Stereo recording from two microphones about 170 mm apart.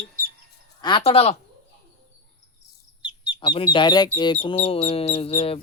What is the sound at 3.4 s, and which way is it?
Speech, 30° left (ahead or behind).